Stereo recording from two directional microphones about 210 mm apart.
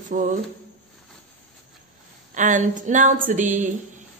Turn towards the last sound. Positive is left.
turn(degrees=-35)  # may be behind; listen again after turning